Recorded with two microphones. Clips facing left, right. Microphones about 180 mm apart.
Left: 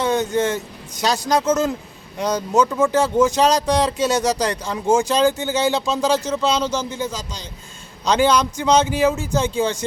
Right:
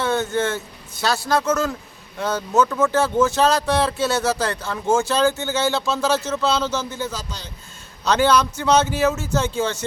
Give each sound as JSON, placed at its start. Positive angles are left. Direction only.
{"t": 0.0, "sound": "speech", "side_deg": 15}